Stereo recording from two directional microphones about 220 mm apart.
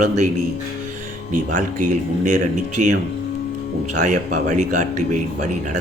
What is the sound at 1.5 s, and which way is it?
Speech, 35° right (ahead or behind).